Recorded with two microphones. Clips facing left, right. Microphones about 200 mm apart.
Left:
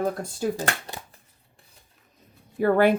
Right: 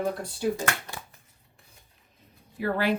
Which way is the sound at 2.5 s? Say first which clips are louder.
Left 7 dB; 50° left (ahead or behind).